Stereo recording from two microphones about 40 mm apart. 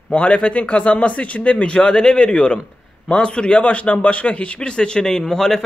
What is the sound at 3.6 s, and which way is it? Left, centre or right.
A man's voice, left.